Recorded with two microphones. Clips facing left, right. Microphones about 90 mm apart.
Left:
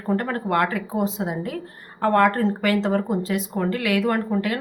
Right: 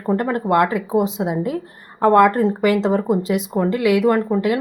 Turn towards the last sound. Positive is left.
turn(degrees=-20)  # may be behind; listen again after turning